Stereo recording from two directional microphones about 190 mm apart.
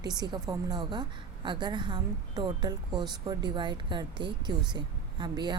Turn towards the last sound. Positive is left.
turn(degrees=-20)  # may be behind; listen again after turning